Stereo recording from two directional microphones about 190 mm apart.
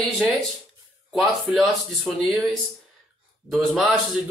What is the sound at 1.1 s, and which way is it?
A man's voice, centre (ahead or behind).